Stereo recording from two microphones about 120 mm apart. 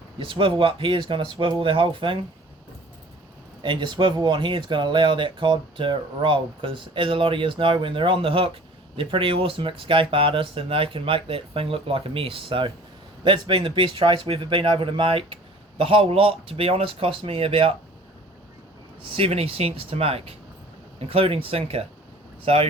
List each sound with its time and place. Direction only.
0.2 s speech: 45° right (ahead or behind)
3.6 s speech: 40° right (ahead or behind)
19.1 s speech: 55° right (ahead or behind)